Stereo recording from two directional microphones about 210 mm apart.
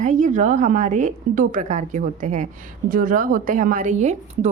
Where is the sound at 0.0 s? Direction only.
35° right (ahead or behind).